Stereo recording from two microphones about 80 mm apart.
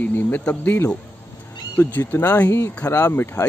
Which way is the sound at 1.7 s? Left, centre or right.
Left.